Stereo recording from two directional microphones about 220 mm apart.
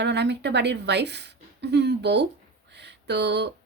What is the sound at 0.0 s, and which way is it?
A woman's voice, 50° right (ahead or behind).